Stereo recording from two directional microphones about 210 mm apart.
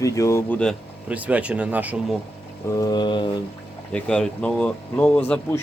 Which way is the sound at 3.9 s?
5° left (ahead or behind).